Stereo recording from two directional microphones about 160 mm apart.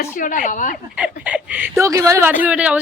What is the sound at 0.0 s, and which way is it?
Speech, 55° left (ahead or behind).